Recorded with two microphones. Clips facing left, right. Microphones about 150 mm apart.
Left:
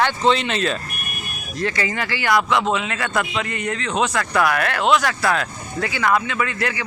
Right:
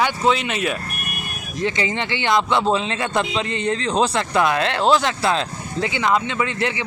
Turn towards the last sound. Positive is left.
turn(degrees=-20)  # may be behind; listen again after turning